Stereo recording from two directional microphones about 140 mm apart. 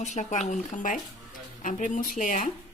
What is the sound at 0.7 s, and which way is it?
Speech, 65° left (ahead or behind).